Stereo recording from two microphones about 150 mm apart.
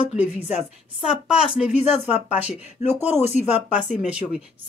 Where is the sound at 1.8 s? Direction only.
45° left (ahead or behind).